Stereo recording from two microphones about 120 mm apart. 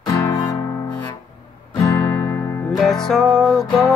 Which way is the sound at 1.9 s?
25° left (ahead or behind).